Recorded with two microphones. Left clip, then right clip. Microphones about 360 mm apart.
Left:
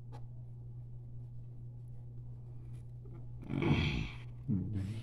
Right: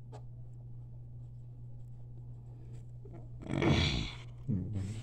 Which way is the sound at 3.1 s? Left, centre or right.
Right.